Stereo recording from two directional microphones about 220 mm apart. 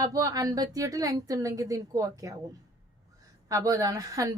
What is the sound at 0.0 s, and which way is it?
A woman's voice, 15° right (ahead or behind).